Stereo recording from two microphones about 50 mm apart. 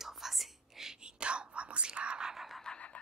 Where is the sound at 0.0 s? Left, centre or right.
Centre.